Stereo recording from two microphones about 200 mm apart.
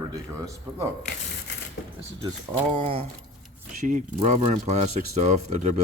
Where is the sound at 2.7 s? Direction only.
30° right (ahead or behind).